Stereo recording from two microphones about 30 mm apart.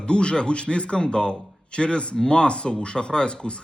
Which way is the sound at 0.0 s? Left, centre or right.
Left.